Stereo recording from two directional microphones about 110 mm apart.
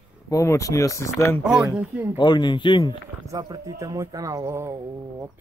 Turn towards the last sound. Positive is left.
turn(degrees=-25)  # may be behind; listen again after turning